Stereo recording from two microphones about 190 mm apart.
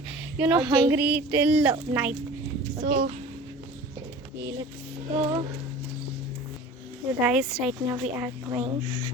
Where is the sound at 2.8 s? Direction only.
45° right (ahead or behind).